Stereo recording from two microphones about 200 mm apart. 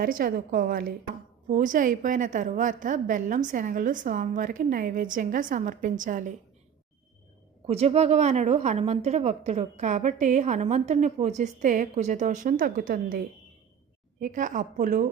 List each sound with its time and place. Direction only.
0.0 s a woman's voice: 45° right (ahead or behind)
7.7 s a woman's voice: 30° right (ahead or behind)